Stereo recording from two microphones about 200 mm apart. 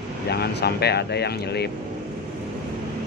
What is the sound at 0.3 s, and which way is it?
Speech, 55° left (ahead or behind).